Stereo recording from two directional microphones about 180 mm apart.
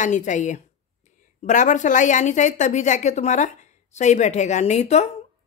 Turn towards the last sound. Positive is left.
turn(degrees=40)  # may be behind; listen again after turning